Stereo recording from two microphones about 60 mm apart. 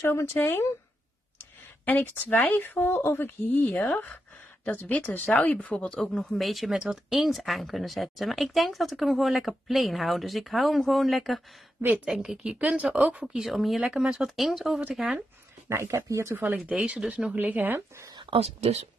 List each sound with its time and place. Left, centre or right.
0.0 s speech: left; by 6.0 s centre
6.1 s speech: centre
12.2 s speech: centre
13.3 s speech: centre
15.9 s speech: right
16.3 s speech: right
17.4 s speech: right